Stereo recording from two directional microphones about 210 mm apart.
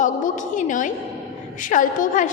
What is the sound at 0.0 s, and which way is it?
A woman's voice, 40° left (ahead or behind).